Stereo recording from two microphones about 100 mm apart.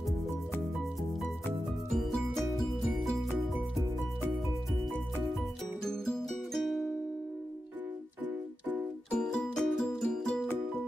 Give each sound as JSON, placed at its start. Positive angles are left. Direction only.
{"t": 1.9, "sound": "music", "side_deg": 0}
{"t": 5.9, "sound": "music", "side_deg": 5}
{"t": 9.1, "sound": "music", "side_deg": 5}